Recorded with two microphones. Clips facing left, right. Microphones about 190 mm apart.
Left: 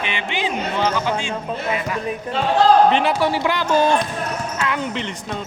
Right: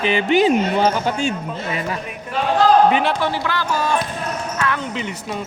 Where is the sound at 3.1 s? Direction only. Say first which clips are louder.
Left 2 dB; 10° left (ahead or behind).